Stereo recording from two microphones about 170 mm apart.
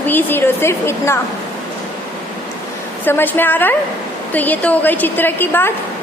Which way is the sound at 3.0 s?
10° left (ahead or behind).